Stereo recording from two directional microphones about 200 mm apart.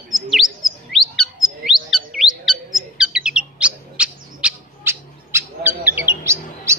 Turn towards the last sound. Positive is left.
turn(degrees=-15)  # may be behind; listen again after turning